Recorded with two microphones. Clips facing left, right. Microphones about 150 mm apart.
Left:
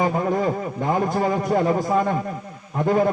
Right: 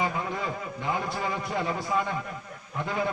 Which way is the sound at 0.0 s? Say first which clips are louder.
Left 9 dB; 45° left (ahead or behind).